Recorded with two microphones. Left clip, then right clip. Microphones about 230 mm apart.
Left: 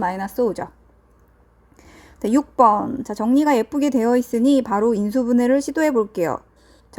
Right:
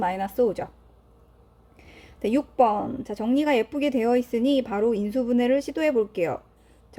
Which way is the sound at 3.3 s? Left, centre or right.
Left.